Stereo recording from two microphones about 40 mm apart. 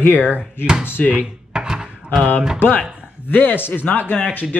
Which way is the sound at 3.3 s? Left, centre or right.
Left.